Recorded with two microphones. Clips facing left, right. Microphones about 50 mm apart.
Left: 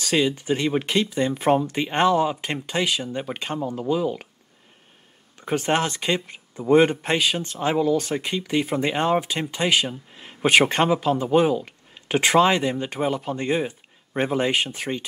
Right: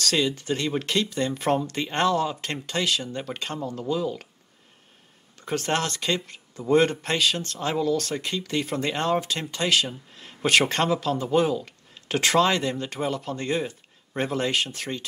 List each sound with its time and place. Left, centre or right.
0.0 s speech: centre
5.4 s speech: centre